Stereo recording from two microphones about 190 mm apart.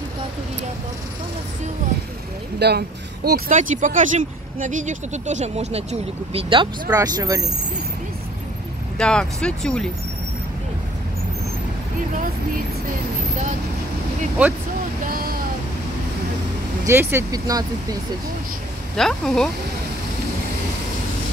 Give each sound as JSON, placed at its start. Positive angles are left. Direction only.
{"t": 2.6, "sound": "speech", "side_deg": -60}
{"t": 3.3, "sound": "speech", "side_deg": -50}
{"t": 8.9, "sound": "speech", "side_deg": 5}
{"t": 15.0, "sound": "vehicle", "side_deg": -50}
{"t": 16.8, "sound": "speech", "side_deg": -10}
{"t": 18.9, "sound": "speech", "side_deg": 0}